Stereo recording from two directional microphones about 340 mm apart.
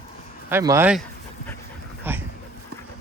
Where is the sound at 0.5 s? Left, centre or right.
Centre.